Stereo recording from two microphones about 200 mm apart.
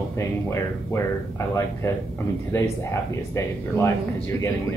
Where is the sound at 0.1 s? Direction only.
15° left (ahead or behind).